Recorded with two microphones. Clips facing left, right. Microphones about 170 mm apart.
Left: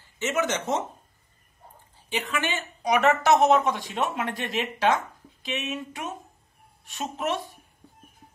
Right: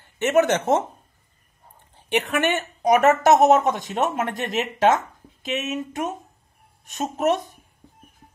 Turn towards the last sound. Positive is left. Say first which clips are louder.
# right 7 dB
turn(degrees=-45)  # may be behind; listen again after turning